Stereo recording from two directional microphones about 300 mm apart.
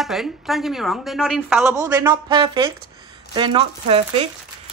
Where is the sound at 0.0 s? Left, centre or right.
Centre.